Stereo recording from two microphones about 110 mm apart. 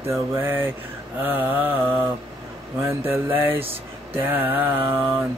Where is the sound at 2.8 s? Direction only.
20° right (ahead or behind).